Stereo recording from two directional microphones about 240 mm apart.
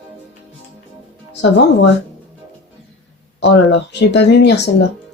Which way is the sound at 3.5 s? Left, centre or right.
Left.